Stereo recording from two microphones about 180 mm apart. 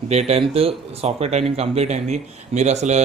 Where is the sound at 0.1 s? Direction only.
35° right (ahead or behind).